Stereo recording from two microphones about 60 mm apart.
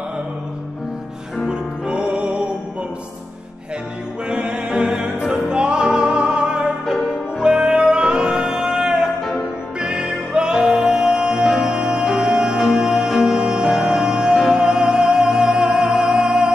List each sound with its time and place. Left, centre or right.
1.5 s music: centre
4.3 s music: centre